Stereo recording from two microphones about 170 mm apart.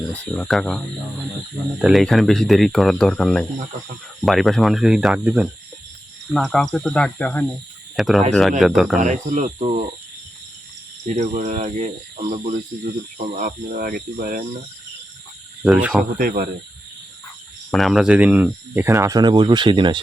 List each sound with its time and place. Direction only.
0.1 s speech: 5° left (ahead or behind)
1.8 s speech: centre (ahead or behind)
7.9 s speech: centre (ahead or behind)
9.0 s speech: 45° right (ahead or behind)
11.2 s speech: 45° right (ahead or behind)
15.6 s speech: 5° right (ahead or behind)
16.1 s speech: 65° right (ahead or behind)
17.7 s speech: centre (ahead or behind); by 20.0 s 30° right (ahead or behind)